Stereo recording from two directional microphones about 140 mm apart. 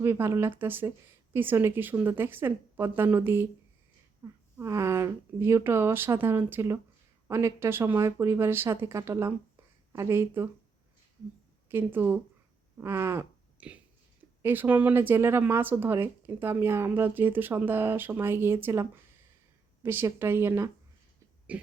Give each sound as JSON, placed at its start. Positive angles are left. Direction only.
{"t": 0.0, "sound": "speech", "side_deg": -15}
{"t": 11.7, "sound": "speech", "side_deg": -15}
{"t": 21.5, "sound": "cough", "side_deg": -10}